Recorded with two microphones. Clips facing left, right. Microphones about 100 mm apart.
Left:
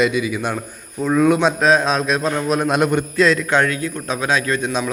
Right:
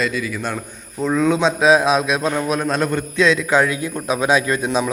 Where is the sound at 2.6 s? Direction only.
10° left (ahead or behind).